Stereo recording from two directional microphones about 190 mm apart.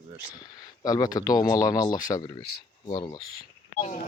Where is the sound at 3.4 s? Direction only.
45° left (ahead or behind).